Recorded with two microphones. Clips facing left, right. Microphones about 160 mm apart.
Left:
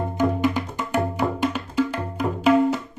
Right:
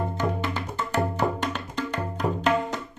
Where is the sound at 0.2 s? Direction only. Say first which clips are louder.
Left 7 dB; 15° left (ahead or behind).